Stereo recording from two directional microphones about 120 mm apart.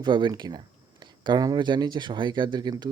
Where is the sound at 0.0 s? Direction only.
40° right (ahead or behind).